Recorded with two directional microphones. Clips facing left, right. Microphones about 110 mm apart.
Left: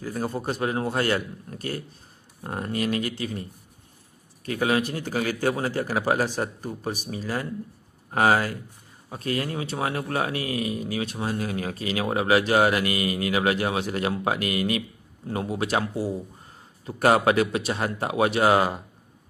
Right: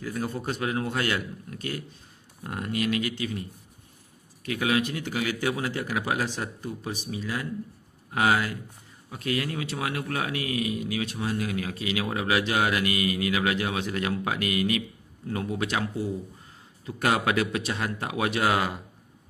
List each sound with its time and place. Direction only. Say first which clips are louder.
0.0 s a man's voice: left 2 dB; 30° left (ahead or behind)